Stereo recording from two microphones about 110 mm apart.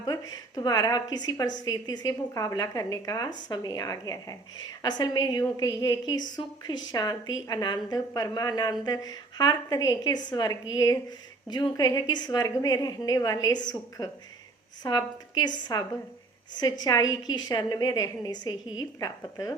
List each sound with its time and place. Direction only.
0.0 s a woman's voice: 35° left (ahead or behind)